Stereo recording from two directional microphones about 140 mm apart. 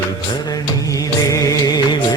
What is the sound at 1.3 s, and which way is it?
Music, 25° left (ahead or behind).